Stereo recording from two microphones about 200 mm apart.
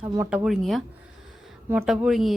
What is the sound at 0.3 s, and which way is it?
A woman's voice, 5° right (ahead or behind).